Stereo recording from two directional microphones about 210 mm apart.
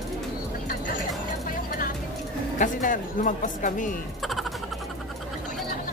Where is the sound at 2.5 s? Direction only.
40° left (ahead or behind).